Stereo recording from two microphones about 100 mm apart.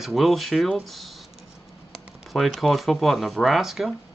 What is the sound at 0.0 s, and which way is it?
Speech, centre (ahead or behind).